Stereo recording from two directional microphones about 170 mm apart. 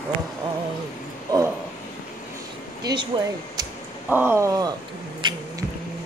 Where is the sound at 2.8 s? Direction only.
25° right (ahead or behind).